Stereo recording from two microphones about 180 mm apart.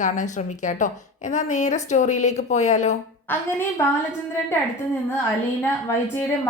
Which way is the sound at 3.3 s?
15° left (ahead or behind).